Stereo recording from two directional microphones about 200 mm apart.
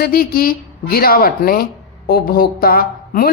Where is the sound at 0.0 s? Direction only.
50° left (ahead or behind).